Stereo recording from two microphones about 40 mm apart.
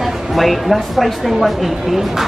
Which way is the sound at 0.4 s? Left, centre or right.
Centre.